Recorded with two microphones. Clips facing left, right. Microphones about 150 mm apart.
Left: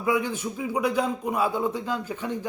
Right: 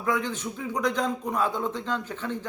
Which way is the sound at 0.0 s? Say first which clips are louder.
Left 3 dB; 10° left (ahead or behind).